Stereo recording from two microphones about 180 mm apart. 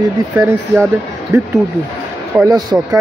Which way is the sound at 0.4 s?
15° right (ahead or behind).